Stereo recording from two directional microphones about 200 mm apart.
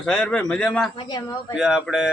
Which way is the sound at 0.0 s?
5° left (ahead or behind).